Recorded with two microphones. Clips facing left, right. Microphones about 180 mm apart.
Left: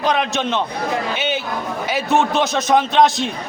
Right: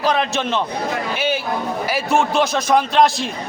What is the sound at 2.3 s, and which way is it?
Speech, centre (ahead or behind).